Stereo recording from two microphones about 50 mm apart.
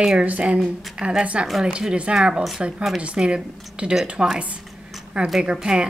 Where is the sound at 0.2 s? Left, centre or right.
Right.